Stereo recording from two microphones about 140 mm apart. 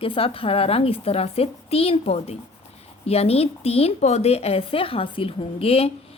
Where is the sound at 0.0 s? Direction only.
40° left (ahead or behind).